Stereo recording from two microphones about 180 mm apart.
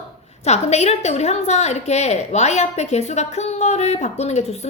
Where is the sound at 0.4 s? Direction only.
40° left (ahead or behind).